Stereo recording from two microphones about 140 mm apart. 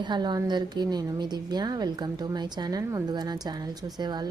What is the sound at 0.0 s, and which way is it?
A woman's voice, 30° right (ahead or behind).